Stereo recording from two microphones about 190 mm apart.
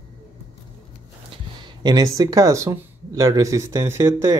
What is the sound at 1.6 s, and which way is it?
Speech, 20° right (ahead or behind).